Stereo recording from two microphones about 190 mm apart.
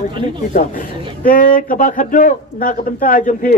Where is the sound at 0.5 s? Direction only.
40° left (ahead or behind).